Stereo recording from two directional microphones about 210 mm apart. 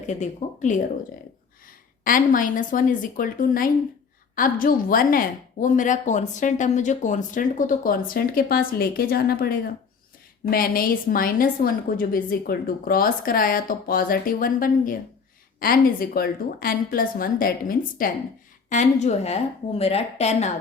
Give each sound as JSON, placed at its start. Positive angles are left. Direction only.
{"t": 0.1, "sound": "a woman's voice", "side_deg": 35}
{"t": 2.0, "sound": "a woman's voice", "side_deg": 40}